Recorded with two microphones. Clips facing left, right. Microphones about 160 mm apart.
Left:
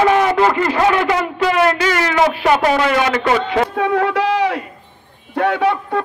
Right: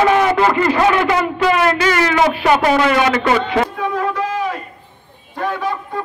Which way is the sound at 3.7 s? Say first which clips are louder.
Left 4 dB; 65° left (ahead or behind).